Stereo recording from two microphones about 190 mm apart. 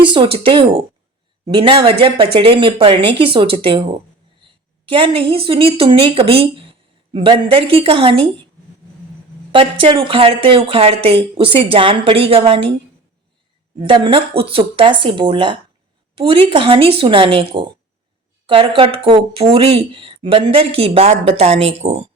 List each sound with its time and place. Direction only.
0.0 s a woman's voice: 25° right (ahead or behind)
9.5 s speech: 25° right (ahead or behind)
13.7 s speech: 25° right (ahead or behind)